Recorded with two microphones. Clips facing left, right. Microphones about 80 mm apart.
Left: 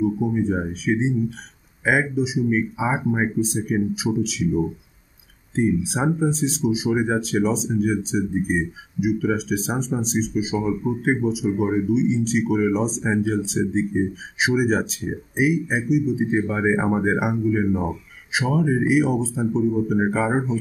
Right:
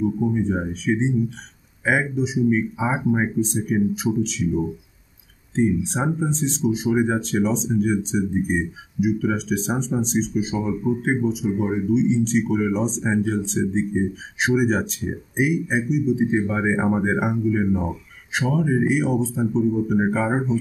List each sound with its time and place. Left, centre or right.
0.4 s speech: centre